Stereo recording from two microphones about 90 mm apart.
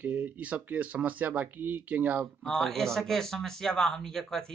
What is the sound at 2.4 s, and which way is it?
Speech, 5° left (ahead or behind).